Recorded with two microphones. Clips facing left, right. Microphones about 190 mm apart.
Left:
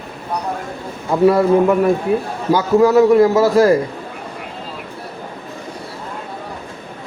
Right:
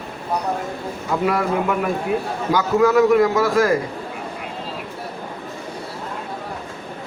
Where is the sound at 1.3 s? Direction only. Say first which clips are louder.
Left 9 dB; 30° left (ahead or behind).